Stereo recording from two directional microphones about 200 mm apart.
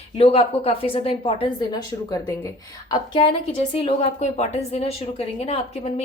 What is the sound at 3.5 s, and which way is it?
A woman's voice, 30° left (ahead or behind).